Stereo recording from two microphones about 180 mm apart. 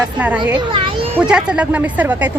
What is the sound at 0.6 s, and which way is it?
Children playing, 30° right (ahead or behind).